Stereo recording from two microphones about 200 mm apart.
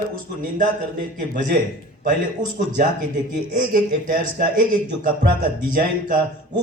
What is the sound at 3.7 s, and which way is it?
A man's voice, 45° right (ahead or behind).